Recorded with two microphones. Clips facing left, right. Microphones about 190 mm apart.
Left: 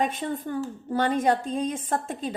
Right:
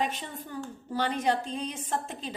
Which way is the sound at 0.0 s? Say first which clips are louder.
Left 6 dB; 50° left (ahead or behind).